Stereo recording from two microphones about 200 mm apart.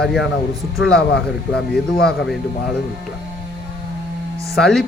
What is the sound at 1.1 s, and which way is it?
Speech, 55° left (ahead or behind).